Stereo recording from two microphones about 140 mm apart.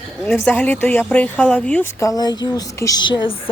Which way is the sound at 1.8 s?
20° left (ahead or behind).